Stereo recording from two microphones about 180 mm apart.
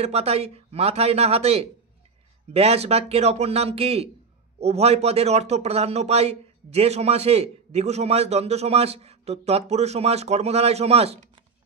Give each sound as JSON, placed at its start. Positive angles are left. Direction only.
{"t": 0.0, "sound": "speech", "side_deg": -35}